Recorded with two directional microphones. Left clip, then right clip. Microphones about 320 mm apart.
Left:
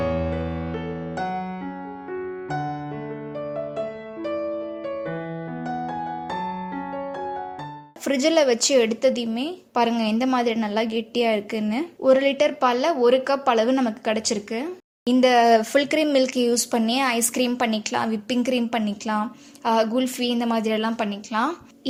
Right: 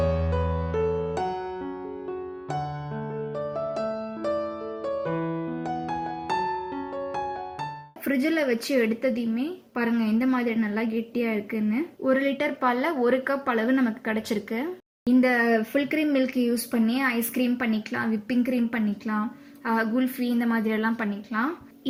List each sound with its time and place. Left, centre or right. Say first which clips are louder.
8.0 s a woman's voice: left 6 dB; centre